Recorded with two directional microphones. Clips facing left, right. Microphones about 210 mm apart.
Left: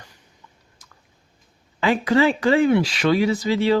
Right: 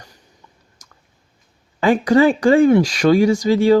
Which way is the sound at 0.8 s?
45° right (ahead or behind).